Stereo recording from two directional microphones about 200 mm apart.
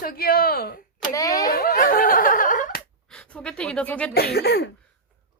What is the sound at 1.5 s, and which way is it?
A woman's voice, 45° left (ahead or behind).